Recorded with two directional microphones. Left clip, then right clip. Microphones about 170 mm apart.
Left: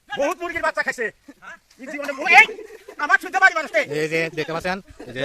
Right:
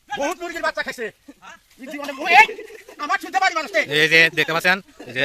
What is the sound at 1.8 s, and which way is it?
Speech, 5° right (ahead or behind).